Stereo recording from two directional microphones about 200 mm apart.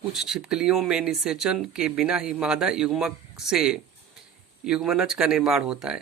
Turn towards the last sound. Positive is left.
turn(degrees=-5)  # may be behind; listen again after turning